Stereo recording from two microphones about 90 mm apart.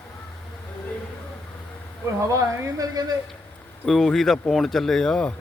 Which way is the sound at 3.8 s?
Centre (ahead or behind).